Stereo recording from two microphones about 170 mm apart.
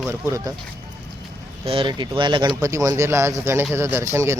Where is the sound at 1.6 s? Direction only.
30° right (ahead or behind).